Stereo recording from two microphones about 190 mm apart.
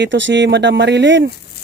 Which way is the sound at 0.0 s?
75° right (ahead or behind).